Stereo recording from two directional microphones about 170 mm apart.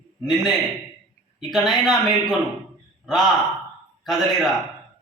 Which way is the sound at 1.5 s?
Centre (ahead or behind).